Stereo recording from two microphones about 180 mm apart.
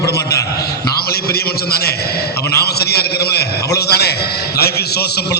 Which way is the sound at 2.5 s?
60° left (ahead or behind).